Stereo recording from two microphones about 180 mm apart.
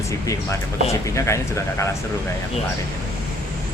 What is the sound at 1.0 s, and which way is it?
Speech, 15° left (ahead or behind).